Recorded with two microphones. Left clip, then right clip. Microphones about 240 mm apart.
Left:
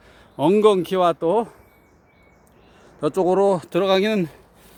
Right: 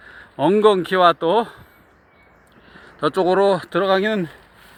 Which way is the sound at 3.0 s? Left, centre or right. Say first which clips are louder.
Right 2 dB; centre.